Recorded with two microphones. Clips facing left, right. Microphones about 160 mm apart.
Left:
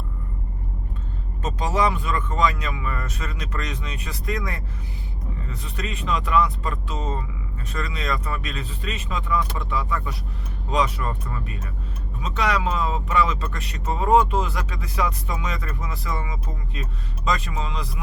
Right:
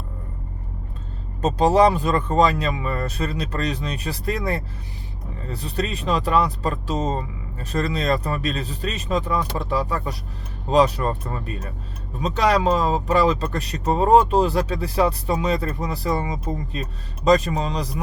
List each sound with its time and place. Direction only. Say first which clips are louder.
1.4 s speech: right 7 dB; 35° right (ahead or behind)